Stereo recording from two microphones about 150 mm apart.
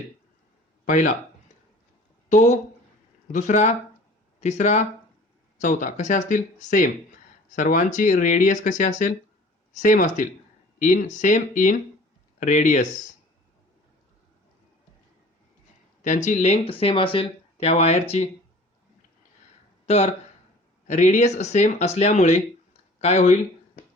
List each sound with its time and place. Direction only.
0.9 s speech: 60° left (ahead or behind)
3.3 s speech: 55° left (ahead or behind)
16.0 s speech: 55° left (ahead or behind)
19.8 s a sound: 40° left (ahead or behind)
20.8 s speech: 55° left (ahead or behind)